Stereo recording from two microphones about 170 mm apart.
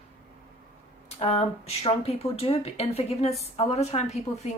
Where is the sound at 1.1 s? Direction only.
35° left (ahead or behind).